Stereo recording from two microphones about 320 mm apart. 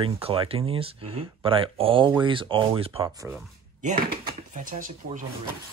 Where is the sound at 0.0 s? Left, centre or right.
Centre.